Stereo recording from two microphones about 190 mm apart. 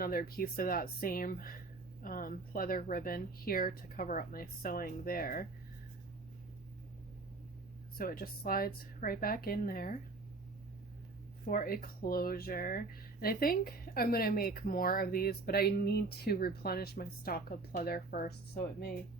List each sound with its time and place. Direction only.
0.0 s speech: 50° left (ahead or behind)
7.9 s speech: 50° left (ahead or behind)
11.4 s speech: 50° left (ahead or behind)